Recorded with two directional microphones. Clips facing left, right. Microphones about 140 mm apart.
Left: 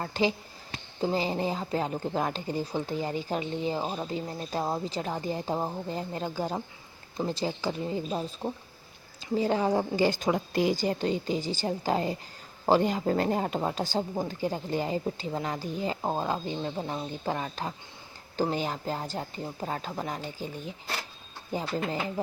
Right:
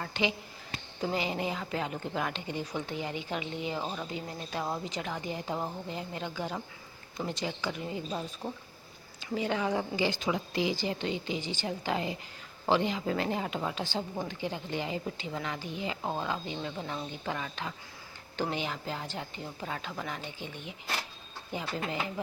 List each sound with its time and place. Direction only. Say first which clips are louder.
0.0 s speech: left 4 dB; 35° left (ahead or behind)